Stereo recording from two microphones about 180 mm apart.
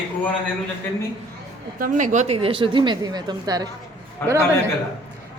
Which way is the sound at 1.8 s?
45° right (ahead or behind).